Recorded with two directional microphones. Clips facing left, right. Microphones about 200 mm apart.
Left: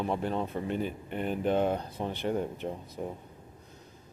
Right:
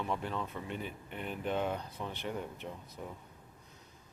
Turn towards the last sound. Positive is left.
turn(degrees=35)  # may be behind; listen again after turning